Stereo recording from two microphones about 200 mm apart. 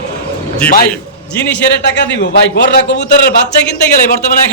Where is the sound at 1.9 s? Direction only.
60° left (ahead or behind).